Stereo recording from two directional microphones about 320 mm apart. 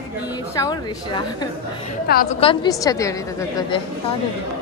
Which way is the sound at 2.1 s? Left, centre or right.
Left.